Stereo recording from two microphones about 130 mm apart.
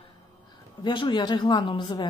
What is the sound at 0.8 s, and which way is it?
A woman's voice, 35° left (ahead or behind).